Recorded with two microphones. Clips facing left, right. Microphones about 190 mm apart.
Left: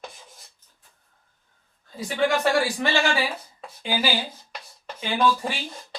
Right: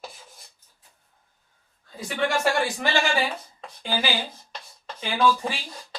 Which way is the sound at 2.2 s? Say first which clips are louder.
Left 2 dB; centre (ahead or behind).